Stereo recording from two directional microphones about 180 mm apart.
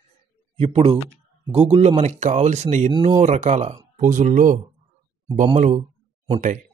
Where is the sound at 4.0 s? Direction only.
45° right (ahead or behind).